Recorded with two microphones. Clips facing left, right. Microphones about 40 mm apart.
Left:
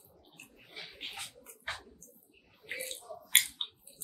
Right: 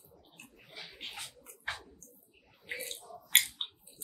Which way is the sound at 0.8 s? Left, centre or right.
Left.